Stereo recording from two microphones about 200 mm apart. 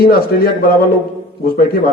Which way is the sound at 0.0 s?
50° left (ahead or behind).